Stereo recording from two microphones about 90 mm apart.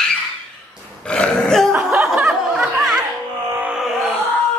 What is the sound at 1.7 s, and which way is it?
Speech, 20° right (ahead or behind).